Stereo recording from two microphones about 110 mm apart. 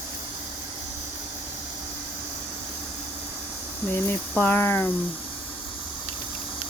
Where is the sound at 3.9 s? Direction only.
20° left (ahead or behind).